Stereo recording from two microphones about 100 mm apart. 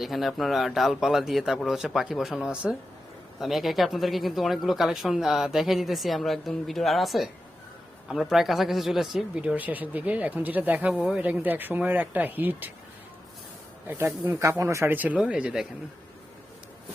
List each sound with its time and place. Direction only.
0.0 s speech: centre (ahead or behind)
10.9 s speech: centre (ahead or behind)
11.2 s speech: 15° right (ahead or behind)
13.8 s speech: 25° right (ahead or behind)
14.9 s speech: 15° right (ahead or behind)